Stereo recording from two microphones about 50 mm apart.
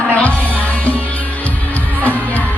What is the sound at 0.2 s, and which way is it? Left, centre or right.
Music, left.